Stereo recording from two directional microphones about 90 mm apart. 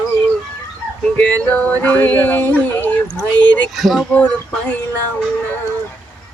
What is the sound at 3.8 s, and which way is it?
Speech, centre (ahead or behind).